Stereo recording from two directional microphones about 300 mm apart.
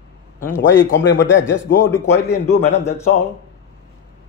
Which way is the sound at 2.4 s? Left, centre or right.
Left.